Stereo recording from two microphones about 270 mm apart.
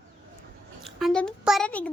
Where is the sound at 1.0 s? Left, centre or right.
Centre.